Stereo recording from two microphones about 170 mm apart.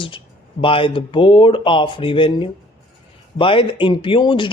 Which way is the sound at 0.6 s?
30° left (ahead or behind).